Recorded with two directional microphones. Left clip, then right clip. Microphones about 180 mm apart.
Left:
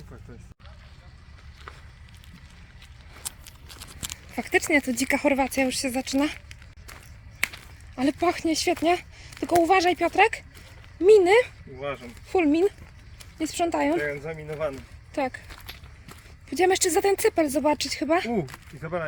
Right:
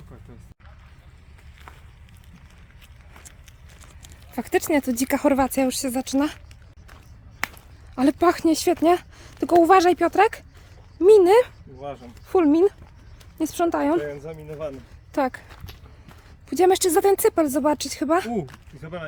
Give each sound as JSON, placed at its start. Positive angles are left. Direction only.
{"t": 4.4, "sound": "speech", "side_deg": -25}
{"t": 7.9, "sound": "speech", "side_deg": -45}
{"t": 14.0, "sound": "speech", "side_deg": 10}
{"t": 15.1, "sound": "speech", "side_deg": -35}
{"t": 16.5, "sound": "speech", "side_deg": -30}
{"t": 18.8, "sound": "speech", "side_deg": 15}